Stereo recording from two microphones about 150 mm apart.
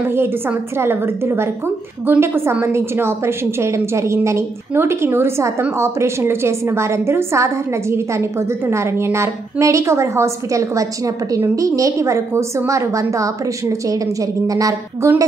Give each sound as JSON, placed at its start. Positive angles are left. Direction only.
{"t": 0.1, "sound": "a woman's voice", "side_deg": -15}